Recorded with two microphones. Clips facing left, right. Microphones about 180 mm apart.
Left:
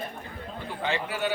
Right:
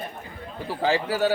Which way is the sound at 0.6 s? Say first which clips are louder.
Right 7 dB; 35° right (ahead or behind).